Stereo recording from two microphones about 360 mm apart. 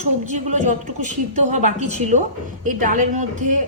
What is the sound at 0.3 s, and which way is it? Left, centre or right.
A woman's voice, centre.